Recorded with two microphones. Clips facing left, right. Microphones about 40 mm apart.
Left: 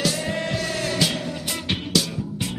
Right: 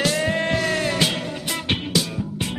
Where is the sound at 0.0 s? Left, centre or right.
Right.